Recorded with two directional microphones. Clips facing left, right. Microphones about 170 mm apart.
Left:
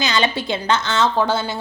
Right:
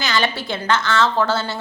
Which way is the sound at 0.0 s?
20° left (ahead or behind).